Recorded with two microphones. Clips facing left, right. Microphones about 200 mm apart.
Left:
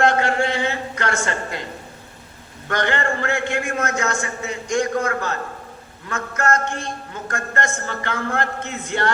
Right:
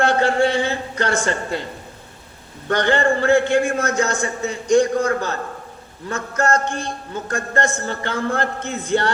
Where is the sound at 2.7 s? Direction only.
30° right (ahead or behind).